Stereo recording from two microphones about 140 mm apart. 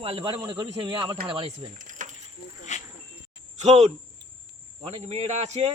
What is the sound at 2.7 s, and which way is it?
Snake, 60° left (ahead or behind).